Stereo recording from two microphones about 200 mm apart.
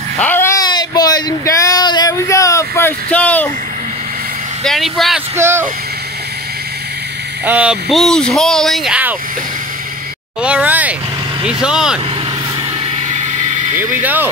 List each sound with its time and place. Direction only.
0.2 s a sound: 10° left (ahead or behind)
4.6 s speech: centre (ahead or behind)
5.3 s speech: 10° right (ahead or behind)
7.4 s speech: 5° right (ahead or behind)
10.4 s speech: 5° right (ahead or behind)
13.1 s vehicle: 35° right (ahead or behind)
13.7 s speech: 10° right (ahead or behind)